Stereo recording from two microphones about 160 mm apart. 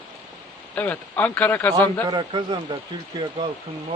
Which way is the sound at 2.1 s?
30° right (ahead or behind).